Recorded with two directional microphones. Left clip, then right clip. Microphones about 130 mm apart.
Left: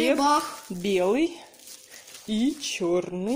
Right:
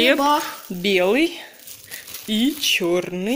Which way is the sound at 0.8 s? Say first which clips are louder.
Right 6 dB; 5° left (ahead or behind).